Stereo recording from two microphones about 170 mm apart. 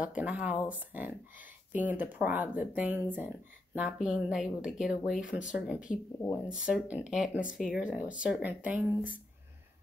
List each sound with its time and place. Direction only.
0.0 s speech: 5° right (ahead or behind)